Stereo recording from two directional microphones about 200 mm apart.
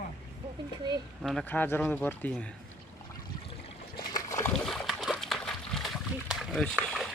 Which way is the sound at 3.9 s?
15° left (ahead or behind).